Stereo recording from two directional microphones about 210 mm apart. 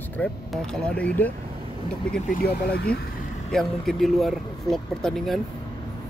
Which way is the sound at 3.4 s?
Centre (ahead or behind).